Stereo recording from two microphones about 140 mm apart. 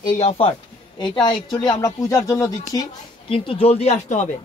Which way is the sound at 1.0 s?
35° left (ahead or behind).